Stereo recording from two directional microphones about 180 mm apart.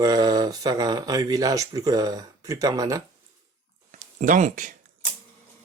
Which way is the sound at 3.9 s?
45° right (ahead or behind).